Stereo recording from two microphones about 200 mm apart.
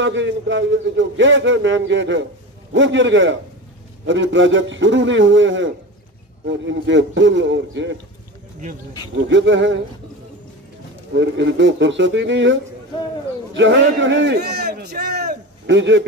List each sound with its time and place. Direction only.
0.0 s a man's voice: 65° right (ahead or behind)
9.1 s a man's voice: 65° right (ahead or behind)
11.1 s a man's voice: 65° right (ahead or behind)
13.6 s a man's voice: 70° right (ahead or behind)